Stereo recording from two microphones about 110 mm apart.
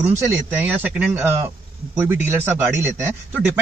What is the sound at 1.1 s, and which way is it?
Speech, 25° right (ahead or behind).